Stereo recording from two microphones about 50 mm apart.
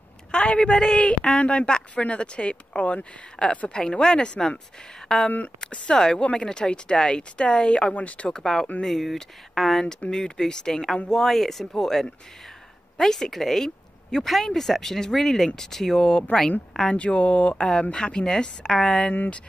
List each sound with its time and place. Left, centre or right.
0.3 s a woman's voice: centre
8.3 s a woman's voice: centre